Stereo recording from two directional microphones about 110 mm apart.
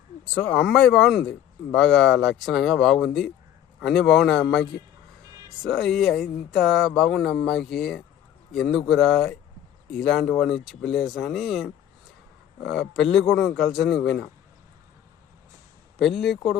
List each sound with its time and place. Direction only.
0.3 s speech: 5° left (ahead or behind)
5.3 s a sound: 35° right (ahead or behind)
5.6 s speech: centre (ahead or behind)
16.0 s speech: centre (ahead or behind)